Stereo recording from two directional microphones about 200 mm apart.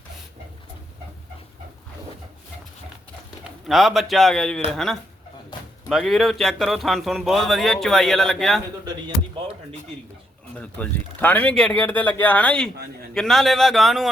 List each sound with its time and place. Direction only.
3.7 s speech: centre (ahead or behind)
8.8 s music: 20° right (ahead or behind)
10.6 s speech: 5° left (ahead or behind)